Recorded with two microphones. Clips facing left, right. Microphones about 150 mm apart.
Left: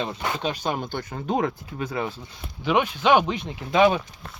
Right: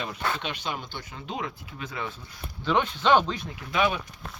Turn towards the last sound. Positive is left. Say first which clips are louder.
# left 7 dB
turn(degrees=35)  # may be behind; listen again after turning